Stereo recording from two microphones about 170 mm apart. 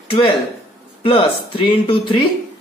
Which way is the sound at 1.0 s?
30° left (ahead or behind).